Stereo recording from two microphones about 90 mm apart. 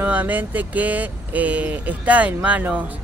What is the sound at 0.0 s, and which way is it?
Speech, 20° right (ahead or behind).